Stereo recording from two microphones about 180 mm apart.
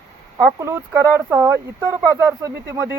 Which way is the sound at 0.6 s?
15° right (ahead or behind).